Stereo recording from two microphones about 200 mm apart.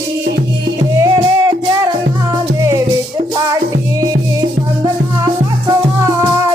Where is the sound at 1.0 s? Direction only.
15° right (ahead or behind).